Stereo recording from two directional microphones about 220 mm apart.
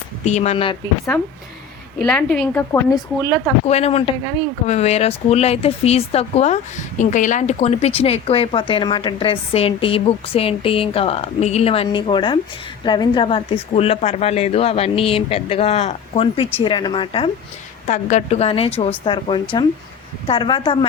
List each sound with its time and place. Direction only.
0.3 s speech: 30° left (ahead or behind)
2.0 s speech: 5° left (ahead or behind)
3.7 s speech: 30° left (ahead or behind)